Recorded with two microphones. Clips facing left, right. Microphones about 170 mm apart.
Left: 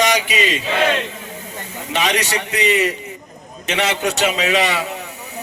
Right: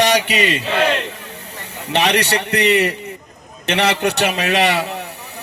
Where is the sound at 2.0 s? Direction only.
65° right (ahead or behind).